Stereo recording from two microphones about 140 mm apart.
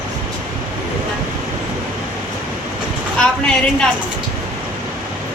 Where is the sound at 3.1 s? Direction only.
5° left (ahead or behind).